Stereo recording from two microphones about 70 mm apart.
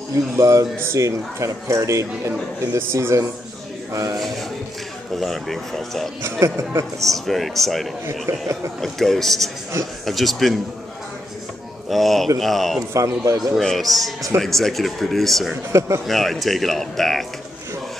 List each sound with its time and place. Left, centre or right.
0.4 s speech: right
3.9 s speech: right
5.1 s speech: centre
6.4 s speech: right
7.0 s speech: centre
8.3 s speech: right
8.8 s speech: centre
11.9 s speech: centre
12.9 s speech: right
13.4 s speech: centre
15.7 s speech: right
16.1 s speech: centre